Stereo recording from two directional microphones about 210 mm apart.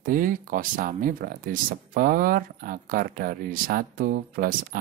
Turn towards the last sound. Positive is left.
turn(degrees=-45)  # may be behind; listen again after turning